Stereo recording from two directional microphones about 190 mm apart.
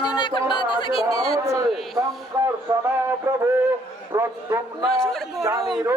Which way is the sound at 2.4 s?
15° right (ahead or behind).